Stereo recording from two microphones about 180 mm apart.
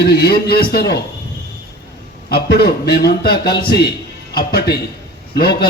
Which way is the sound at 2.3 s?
60° left (ahead or behind).